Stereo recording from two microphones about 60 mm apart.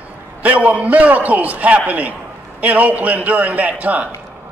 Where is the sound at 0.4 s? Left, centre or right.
Right.